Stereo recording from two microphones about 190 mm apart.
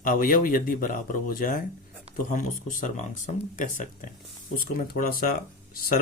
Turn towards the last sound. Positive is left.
turn(degrees=50)  # may be behind; listen again after turning